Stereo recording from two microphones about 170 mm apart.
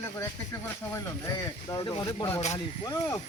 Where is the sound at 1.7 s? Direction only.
25° left (ahead or behind).